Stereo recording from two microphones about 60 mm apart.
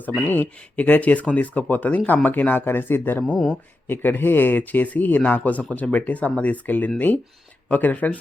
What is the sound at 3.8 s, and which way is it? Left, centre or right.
Speech, left.